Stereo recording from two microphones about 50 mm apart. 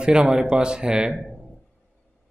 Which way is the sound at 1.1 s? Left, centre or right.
Centre.